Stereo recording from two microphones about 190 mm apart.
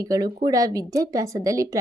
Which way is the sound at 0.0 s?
20° right (ahead or behind).